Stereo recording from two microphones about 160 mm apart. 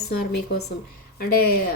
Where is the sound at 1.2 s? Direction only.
75° left (ahead or behind).